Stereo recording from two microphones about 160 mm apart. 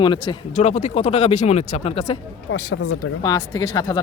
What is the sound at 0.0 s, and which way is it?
Speech, 30° left (ahead or behind).